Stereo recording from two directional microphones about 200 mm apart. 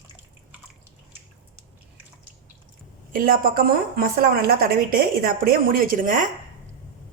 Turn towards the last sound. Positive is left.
turn(degrees=-40)  # may be behind; listen again after turning